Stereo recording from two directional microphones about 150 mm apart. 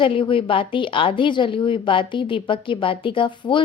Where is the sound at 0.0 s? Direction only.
35° left (ahead or behind).